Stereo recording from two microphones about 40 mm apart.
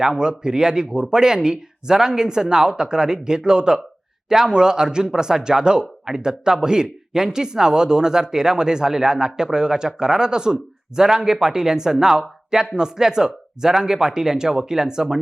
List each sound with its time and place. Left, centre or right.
0.0 s speech: centre